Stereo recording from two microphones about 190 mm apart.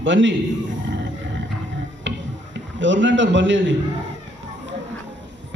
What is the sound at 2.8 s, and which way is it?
Speech, 75° right (ahead or behind).